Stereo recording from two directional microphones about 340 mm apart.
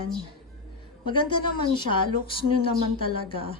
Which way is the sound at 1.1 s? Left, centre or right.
Centre.